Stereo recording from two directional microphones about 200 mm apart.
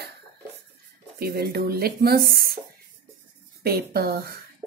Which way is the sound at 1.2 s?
50° right (ahead or behind).